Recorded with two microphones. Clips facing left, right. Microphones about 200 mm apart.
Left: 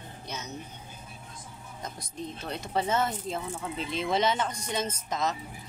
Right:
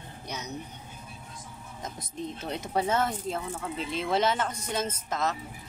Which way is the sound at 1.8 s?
20° right (ahead or behind).